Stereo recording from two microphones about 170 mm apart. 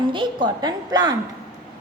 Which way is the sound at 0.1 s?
30° right (ahead or behind).